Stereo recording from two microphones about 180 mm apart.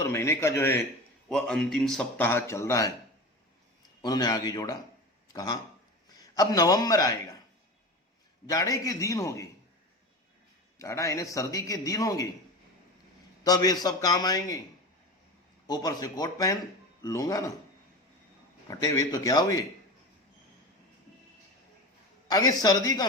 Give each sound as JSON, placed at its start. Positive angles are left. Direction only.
{"t": 0.0, "sound": "a man's voice", "side_deg": 15}
{"t": 1.3, "sound": "a man's voice", "side_deg": 5}
{"t": 4.0, "sound": "a man's voice", "side_deg": 20}
{"t": 8.4, "sound": "a man's voice", "side_deg": 20}
{"t": 10.8, "sound": "a man's voice", "side_deg": 15}
{"t": 13.4, "sound": "a man's voice", "side_deg": 20}
{"t": 15.6, "sound": "a man's voice", "side_deg": 20}
{"t": 18.7, "sound": "a man's voice", "side_deg": 20}
{"t": 22.3, "sound": "a man's voice", "side_deg": 20}